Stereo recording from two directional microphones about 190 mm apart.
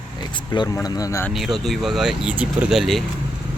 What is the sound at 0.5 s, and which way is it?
Speech, 20° left (ahead or behind).